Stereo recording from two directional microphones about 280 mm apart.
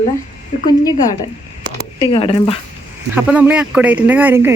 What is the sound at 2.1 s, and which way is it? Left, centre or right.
Speech, centre.